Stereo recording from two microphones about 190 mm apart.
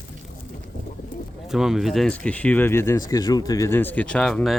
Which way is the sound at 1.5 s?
Centre (ahead or behind).